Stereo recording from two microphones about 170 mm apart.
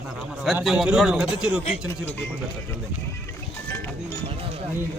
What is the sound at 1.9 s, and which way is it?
Speech, 15° left (ahead or behind).